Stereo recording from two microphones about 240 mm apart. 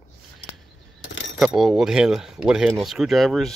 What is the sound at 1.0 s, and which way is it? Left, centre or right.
Keys jangling, left.